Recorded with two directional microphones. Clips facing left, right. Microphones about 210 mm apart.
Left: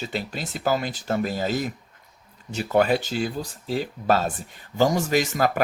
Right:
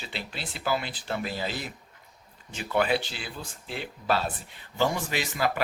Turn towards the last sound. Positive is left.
turn(degrees=45)  # may be behind; listen again after turning